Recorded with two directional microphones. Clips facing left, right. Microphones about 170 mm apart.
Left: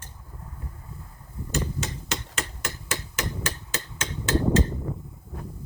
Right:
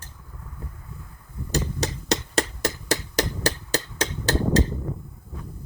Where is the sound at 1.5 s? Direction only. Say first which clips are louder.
Right 3 dB; 35° right (ahead or behind).